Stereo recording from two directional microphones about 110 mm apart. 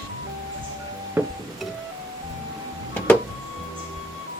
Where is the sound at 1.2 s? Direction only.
25° right (ahead or behind).